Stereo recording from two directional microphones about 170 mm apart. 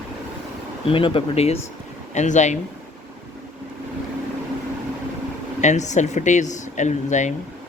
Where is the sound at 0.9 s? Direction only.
30° left (ahead or behind).